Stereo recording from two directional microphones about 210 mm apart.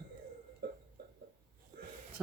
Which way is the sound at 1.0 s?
50° right (ahead or behind).